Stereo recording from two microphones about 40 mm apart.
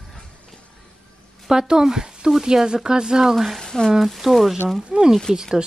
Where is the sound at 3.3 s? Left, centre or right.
Centre.